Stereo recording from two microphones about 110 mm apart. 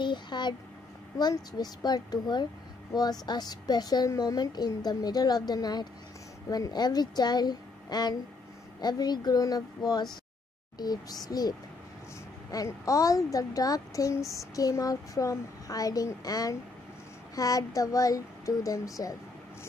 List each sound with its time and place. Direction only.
0.0 s a woman's voice: 45° left (ahead or behind)